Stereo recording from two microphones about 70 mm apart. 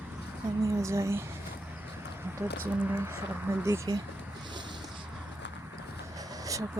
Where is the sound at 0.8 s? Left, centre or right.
Right.